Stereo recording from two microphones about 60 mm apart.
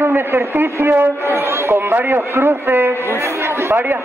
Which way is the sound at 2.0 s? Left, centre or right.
Right.